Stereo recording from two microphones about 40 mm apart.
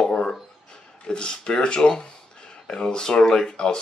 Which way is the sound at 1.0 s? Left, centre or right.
Left.